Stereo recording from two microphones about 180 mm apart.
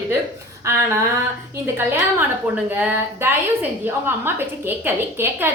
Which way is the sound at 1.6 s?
15° right (ahead or behind).